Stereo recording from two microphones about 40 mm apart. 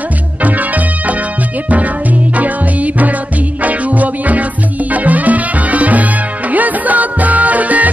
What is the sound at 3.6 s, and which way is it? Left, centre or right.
Music, right.